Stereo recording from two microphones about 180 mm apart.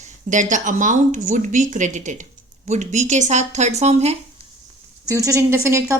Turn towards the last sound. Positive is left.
turn(degrees=-15)  # may be behind; listen again after turning